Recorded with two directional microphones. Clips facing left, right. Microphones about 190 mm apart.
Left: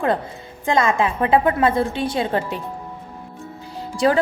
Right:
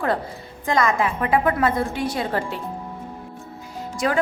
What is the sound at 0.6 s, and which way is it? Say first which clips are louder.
A woman's voice: left 2 dB; 25° left (ahead or behind).